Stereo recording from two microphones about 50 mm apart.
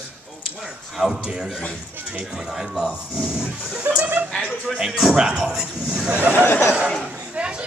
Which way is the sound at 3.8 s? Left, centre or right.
Right.